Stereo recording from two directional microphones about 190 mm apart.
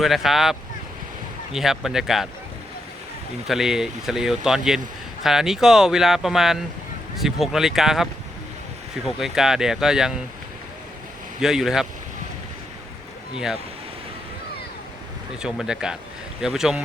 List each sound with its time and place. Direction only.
0.0 s speech: centre (ahead or behind)
1.5 s speech: centre (ahead or behind)
3.4 s speech: centre (ahead or behind)
9.0 s speech: centre (ahead or behind)
11.3 s speech: 5° right (ahead or behind)
13.3 s speech: 5° right (ahead or behind)
15.4 s speech: 5° right (ahead or behind)